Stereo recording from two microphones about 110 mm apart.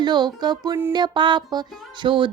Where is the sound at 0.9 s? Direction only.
45° right (ahead or behind).